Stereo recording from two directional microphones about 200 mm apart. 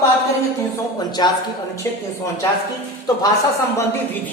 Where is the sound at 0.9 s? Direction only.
20° left (ahead or behind).